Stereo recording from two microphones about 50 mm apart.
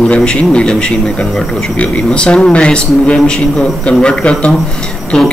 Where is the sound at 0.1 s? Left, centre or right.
Centre.